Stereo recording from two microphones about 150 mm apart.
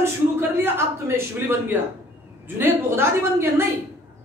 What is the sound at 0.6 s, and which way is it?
A woman's voice, 15° right (ahead or behind).